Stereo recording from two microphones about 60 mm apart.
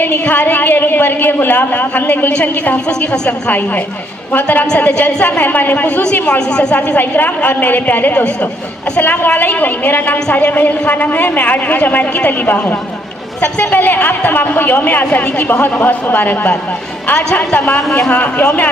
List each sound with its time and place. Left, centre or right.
0.0 s a woman's voice: left
5.9 s a man's voice: centre
17.1 s a man's voice: centre